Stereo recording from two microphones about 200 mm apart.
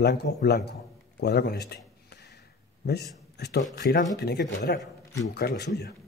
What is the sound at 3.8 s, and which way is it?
A man's voice, 45° left (ahead or behind).